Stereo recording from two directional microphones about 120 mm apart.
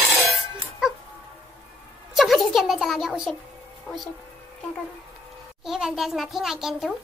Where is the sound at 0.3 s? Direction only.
Centre (ahead or behind).